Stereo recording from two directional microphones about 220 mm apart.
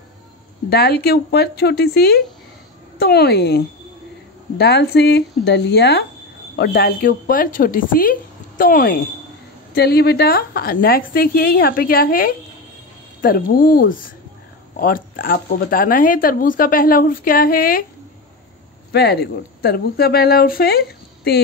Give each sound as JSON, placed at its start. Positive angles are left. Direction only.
{"t": 0.7, "sound": "speech", "side_deg": 50}
{"t": 18.9, "sound": "speech", "side_deg": 50}